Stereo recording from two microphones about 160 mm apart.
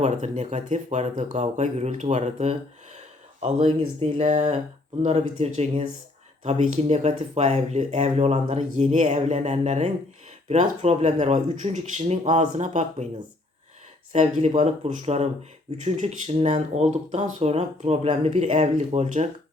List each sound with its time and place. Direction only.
0.0 s speech: 45° right (ahead or behind)
14.1 s speech: 45° right (ahead or behind)